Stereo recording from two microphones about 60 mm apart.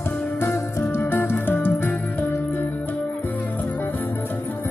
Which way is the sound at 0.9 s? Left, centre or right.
Left.